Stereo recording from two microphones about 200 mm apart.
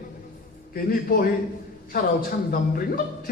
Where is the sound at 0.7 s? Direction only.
45° left (ahead or behind).